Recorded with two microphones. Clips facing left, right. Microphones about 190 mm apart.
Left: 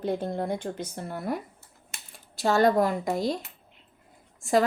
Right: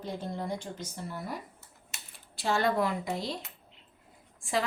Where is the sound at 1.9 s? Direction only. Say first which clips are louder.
Left 3 dB; 45° left (ahead or behind).